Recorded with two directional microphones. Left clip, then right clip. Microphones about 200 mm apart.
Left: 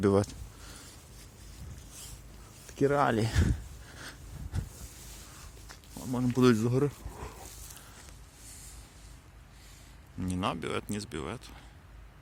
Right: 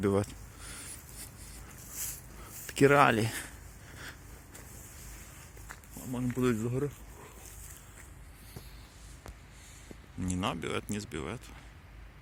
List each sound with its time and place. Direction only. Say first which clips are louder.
0.0 s speech: left 3 dB; 20° left (ahead or behind)
2.7 s speech: right 4 dB; 10° right (ahead or behind)
3.0 s speech: right 3 dB; 5° left (ahead or behind)
3.2 s speech: left 4 dB; 20° left (ahead or behind)
6.0 s speech: left 6 dB; 50° left (ahead or behind)
10.2 s speech: left 1 dB; 5° left (ahead or behind)